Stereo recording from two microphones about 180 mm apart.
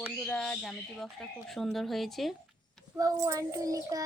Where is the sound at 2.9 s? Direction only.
20° right (ahead or behind).